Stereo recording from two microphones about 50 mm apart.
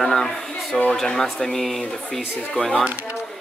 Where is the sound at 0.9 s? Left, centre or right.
Centre.